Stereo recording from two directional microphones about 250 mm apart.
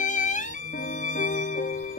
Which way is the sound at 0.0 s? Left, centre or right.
Left.